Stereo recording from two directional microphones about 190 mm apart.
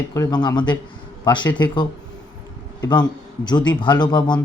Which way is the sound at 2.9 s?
20° left (ahead or behind).